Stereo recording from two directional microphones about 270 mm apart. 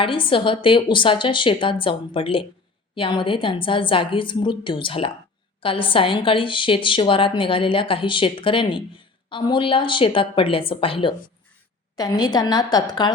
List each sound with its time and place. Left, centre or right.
0.0 s a woman's voice: centre